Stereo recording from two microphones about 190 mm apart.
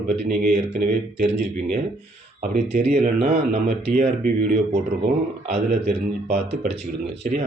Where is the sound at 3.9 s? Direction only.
45° right (ahead or behind).